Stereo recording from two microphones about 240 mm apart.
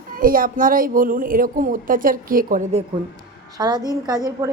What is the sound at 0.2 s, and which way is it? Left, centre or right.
A woman's voice, right.